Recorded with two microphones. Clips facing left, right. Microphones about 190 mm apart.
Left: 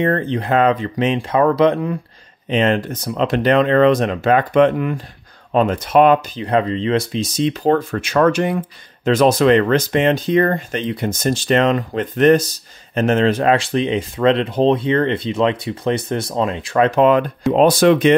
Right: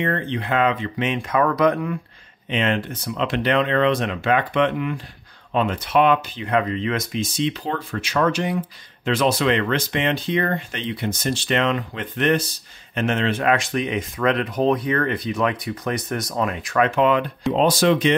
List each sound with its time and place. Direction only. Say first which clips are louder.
0.0 s speech: left 6 dB; 40° left (ahead or behind)
2.5 s speech: left 6 dB; 40° left (ahead or behind)
17.5 s speech: left 5 dB; 55° left (ahead or behind)